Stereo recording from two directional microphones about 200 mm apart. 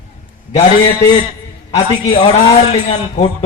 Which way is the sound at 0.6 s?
35° left (ahead or behind).